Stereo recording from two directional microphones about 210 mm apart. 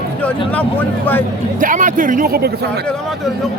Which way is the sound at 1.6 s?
40° right (ahead or behind).